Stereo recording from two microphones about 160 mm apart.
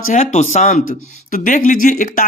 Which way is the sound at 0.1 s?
45° left (ahead or behind).